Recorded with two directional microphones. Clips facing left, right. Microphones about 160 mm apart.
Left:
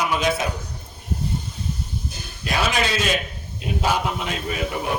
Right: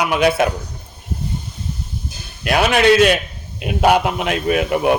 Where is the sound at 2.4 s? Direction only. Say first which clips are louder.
Right 8 dB; 65° right (ahead or behind).